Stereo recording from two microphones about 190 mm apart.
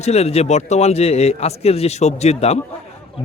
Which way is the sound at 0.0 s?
35° left (ahead or behind).